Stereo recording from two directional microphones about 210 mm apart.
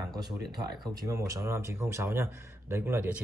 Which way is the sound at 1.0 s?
15° right (ahead or behind).